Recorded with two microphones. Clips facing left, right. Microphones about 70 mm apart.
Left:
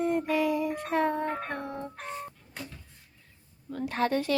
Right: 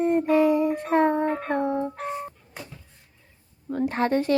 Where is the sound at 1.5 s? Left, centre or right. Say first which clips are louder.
Right 11 dB; right.